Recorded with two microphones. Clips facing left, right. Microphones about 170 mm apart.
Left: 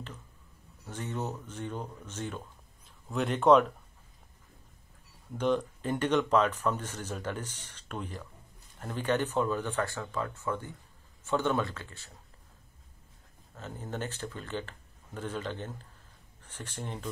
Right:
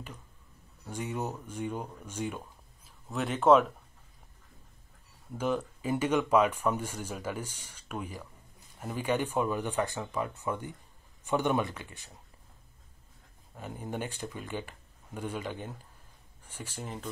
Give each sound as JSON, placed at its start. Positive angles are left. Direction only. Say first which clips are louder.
{"t": 0.8, "sound": "speech", "louder": "right 1 dB", "side_deg": -10}
{"t": 5.3, "sound": "speech", "louder": "left 2 dB", "side_deg": -5}
{"t": 13.6, "sound": "speech", "louder": "right 1 dB", "side_deg": -15}